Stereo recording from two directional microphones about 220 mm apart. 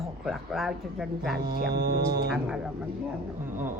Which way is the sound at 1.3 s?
45° right (ahead or behind).